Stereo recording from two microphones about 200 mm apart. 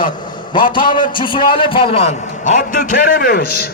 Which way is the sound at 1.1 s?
25° left (ahead or behind).